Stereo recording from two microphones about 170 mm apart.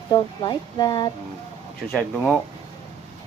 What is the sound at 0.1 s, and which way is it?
Speech, 25° left (ahead or behind).